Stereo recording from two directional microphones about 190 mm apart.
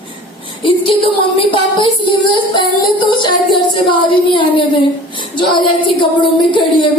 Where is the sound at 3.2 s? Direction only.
25° left (ahead or behind).